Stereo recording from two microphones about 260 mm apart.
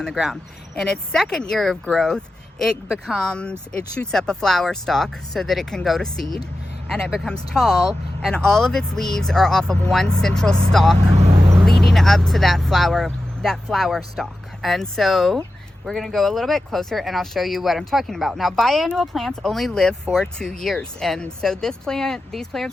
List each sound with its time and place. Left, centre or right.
0.0 s speech: centre
10.9 s vehicle: right
11.6 s speech: centre